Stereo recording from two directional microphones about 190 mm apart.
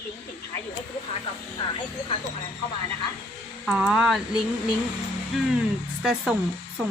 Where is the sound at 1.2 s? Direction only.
25° left (ahead or behind).